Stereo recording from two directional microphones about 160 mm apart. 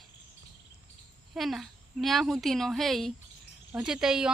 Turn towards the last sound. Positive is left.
turn(degrees=-5)  # may be behind; listen again after turning